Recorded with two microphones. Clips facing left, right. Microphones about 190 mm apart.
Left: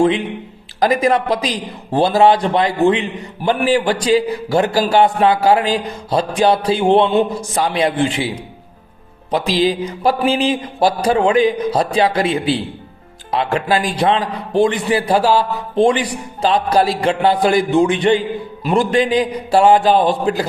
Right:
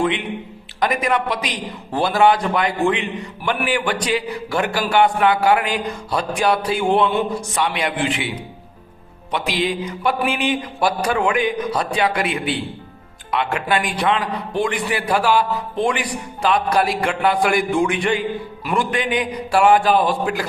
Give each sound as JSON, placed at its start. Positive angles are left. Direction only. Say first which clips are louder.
{"t": 0.0, "sound": "a man's voice", "louder": "left 6 dB", "side_deg": 30}
{"t": 9.3, "sound": "a man's voice", "louder": "left 6 dB", "side_deg": 35}